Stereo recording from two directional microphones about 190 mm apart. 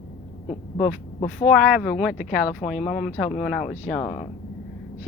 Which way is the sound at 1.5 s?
5° right (ahead or behind).